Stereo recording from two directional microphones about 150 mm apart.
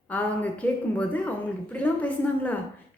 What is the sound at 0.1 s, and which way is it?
Speech, 10° left (ahead or behind).